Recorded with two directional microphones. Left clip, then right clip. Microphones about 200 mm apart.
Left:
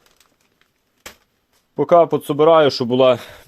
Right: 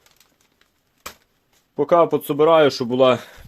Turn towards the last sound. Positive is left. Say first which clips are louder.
# left 2 dB
turn(degrees=35)  # may be behind; listen again after turning